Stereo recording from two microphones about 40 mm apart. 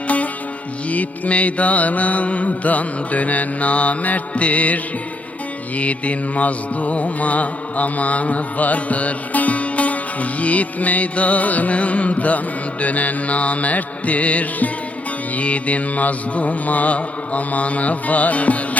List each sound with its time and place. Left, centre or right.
0.9 s music: left